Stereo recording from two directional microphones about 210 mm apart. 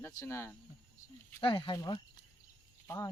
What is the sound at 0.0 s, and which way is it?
Speech, 15° left (ahead or behind).